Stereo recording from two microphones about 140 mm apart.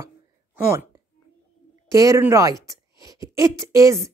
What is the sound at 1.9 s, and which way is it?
Speech, 25° right (ahead or behind).